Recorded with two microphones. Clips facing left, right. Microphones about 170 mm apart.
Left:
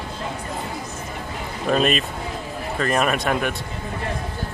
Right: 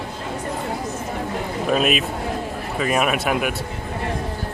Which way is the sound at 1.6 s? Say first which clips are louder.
Left 1 dB; 5° right (ahead or behind).